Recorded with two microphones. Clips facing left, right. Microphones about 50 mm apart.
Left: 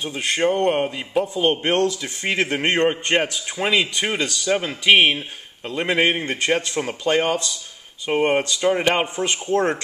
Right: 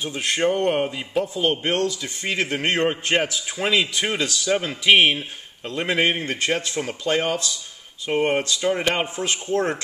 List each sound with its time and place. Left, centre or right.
0.0 s a man's voice: centre
1.4 s speech: centre
1.7 s a man's voice: left
2.6 s a man's voice: centre
9.0 s a man's voice: centre